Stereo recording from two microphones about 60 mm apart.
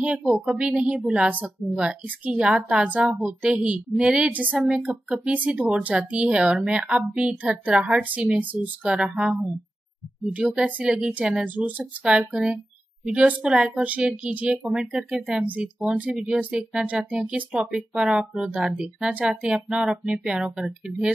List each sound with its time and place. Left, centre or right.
0.0 s a woman's voice: centre
4.6 s a woman's voice: centre